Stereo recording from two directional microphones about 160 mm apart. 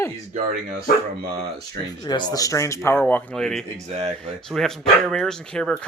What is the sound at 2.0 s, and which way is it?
Speech, 25° left (ahead or behind).